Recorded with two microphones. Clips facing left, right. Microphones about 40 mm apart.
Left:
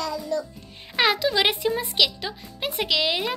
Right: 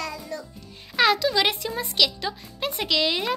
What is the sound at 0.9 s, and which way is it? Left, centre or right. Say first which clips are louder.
A child's voice: right 1 dB; centre.